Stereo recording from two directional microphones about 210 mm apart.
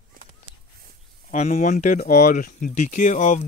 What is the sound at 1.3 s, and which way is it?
Speech, 35° left (ahead or behind).